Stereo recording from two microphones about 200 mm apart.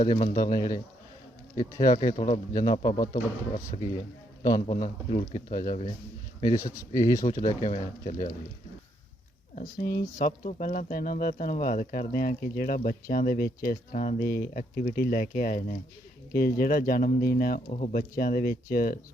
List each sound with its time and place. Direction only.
0.0 s speech: 40° left (ahead or behind)
0.3 s speech: 20° left (ahead or behind)
2.1 s speech: 40° left (ahead or behind)
2.5 s speech: 20° left (ahead or behind)
6.9 s speech: 15° left (ahead or behind)
7.4 s speech: 40° left (ahead or behind)
9.6 s speech: 40° left (ahead or behind)
17.7 s speech: 35° left (ahead or behind)
18.2 s speech: 45° left (ahead or behind)